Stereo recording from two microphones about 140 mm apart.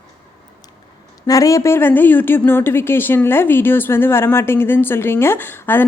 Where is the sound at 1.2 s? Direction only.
25° left (ahead or behind).